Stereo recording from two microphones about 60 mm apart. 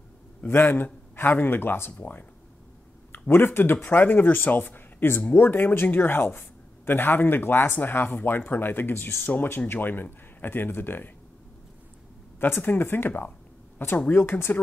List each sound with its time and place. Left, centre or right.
0.5 s speech: left
3.1 s speech: left
12.4 s speech: left